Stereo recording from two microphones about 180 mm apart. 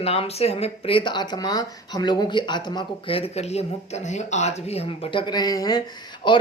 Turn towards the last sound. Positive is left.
turn(degrees=25)  # may be behind; listen again after turning